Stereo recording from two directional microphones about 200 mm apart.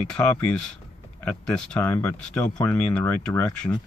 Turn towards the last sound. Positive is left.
turn(degrees=5)  # may be behind; listen again after turning